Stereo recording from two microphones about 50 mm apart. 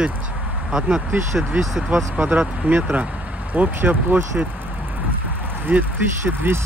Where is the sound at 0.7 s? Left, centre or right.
Centre.